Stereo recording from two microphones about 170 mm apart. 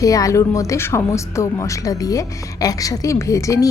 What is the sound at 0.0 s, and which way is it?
A woman's voice, 20° left (ahead or behind).